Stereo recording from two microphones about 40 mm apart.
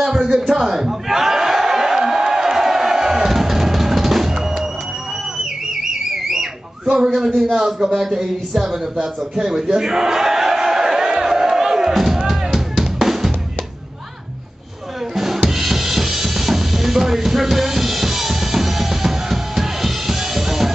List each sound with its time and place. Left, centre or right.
0.0 s a sound: centre
7.2 s a man's voice: centre
11.9 s music: centre
15.1 s drum kit: centre